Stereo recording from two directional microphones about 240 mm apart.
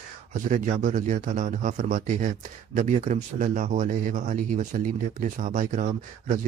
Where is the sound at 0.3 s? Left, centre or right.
Right.